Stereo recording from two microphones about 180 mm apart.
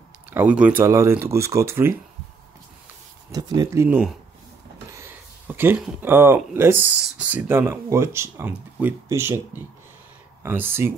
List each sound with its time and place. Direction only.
0.3 s speech: 10° right (ahead or behind)
3.3 s speech: 20° right (ahead or behind)